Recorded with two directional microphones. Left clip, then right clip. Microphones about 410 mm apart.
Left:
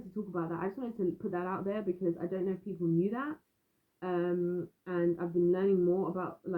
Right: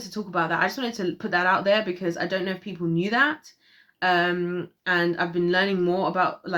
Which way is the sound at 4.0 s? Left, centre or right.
Centre.